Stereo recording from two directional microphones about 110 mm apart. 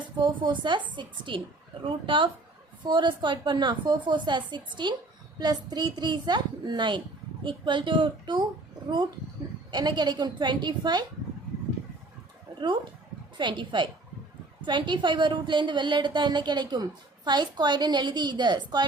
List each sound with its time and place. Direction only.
0.0 s a woman's voice: 45° right (ahead or behind)
12.5 s a woman's voice: 45° right (ahead or behind)